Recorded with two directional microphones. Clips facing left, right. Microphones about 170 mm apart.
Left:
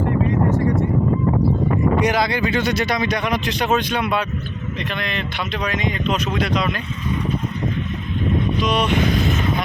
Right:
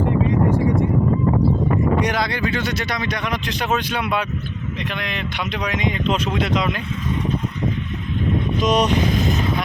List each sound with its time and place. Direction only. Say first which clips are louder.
2.0 s speech: left 2 dB; 5° left (ahead or behind)
3.6 s speech: left 2 dB; 5° right (ahead or behind); by 6.7 s 20° right (ahead or behind)
8.6 s speech: right 4 dB; 40° right (ahead or behind)